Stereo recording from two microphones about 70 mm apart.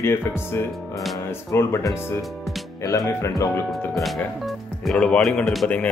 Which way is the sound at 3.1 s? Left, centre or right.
Left.